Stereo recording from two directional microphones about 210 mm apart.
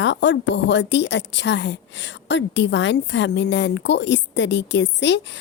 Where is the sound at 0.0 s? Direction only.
60° left (ahead or behind).